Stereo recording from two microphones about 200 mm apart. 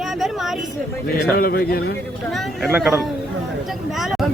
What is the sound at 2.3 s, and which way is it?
Speech, centre (ahead or behind).